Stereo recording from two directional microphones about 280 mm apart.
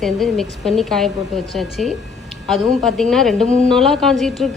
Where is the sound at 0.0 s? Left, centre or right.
Centre.